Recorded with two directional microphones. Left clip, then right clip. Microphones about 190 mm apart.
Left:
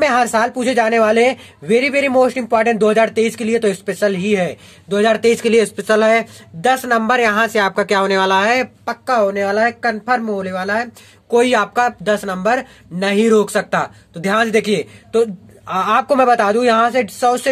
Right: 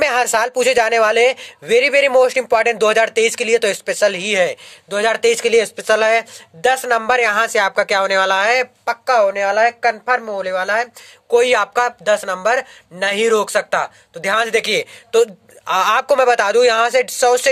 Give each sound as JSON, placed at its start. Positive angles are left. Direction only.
{"t": 0.0, "sound": "speech", "side_deg": -40}
{"t": 5.5, "sound": "speech", "side_deg": -15}
{"t": 5.9, "sound": "speech", "side_deg": -30}